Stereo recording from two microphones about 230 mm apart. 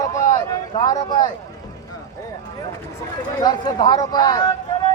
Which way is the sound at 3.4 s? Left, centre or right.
Centre.